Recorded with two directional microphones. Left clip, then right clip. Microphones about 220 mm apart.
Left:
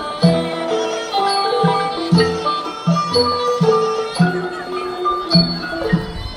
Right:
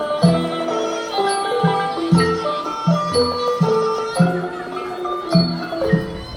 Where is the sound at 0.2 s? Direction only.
35° right (ahead or behind).